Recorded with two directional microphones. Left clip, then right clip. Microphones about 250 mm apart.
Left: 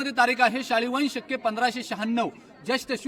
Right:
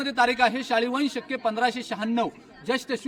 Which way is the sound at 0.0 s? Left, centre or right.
Centre.